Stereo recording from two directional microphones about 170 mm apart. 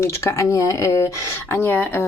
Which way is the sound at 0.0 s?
15° left (ahead or behind).